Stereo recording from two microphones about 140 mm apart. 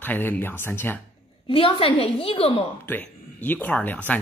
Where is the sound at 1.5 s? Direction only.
40° left (ahead or behind).